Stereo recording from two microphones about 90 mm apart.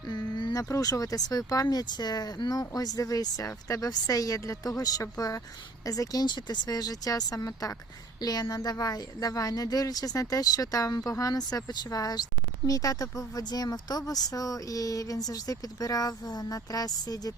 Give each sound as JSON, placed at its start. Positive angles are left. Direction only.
{"t": 0.1, "sound": "a sound", "side_deg": 60}
{"t": 0.5, "sound": "speech", "side_deg": 40}
{"t": 1.6, "sound": "speech", "side_deg": 55}